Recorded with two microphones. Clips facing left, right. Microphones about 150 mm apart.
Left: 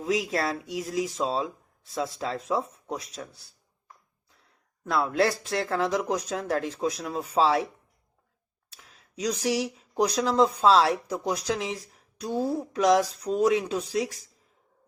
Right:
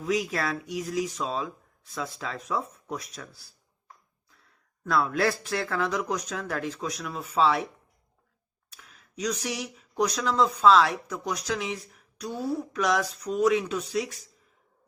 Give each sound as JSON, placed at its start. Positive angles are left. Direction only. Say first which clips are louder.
{"t": 0.0, "sound": "speech", "louder": "left 1 dB", "side_deg": 30}
{"t": 4.9, "sound": "speech", "louder": "left 1 dB", "side_deg": 25}
{"t": 8.7, "sound": "a woman's voice", "louder": "right 1 dB", "side_deg": 30}